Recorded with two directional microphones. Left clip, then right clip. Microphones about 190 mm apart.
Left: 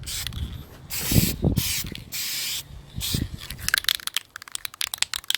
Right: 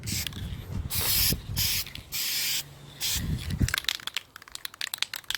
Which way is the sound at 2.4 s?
5° left (ahead or behind).